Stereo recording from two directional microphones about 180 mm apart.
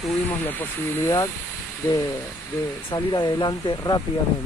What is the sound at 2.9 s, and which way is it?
Speech, 25° left (ahead or behind).